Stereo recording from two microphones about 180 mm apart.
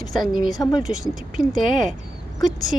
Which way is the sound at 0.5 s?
20° left (ahead or behind).